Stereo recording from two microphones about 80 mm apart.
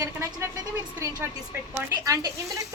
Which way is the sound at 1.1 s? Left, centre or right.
Right.